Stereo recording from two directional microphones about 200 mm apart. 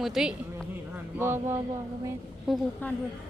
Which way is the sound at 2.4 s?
5° left (ahead or behind).